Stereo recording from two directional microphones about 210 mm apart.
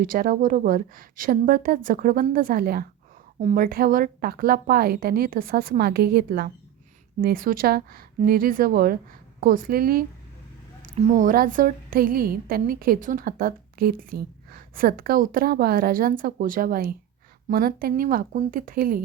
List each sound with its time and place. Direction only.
0.0 s a woman's voice: 40° right (ahead or behind)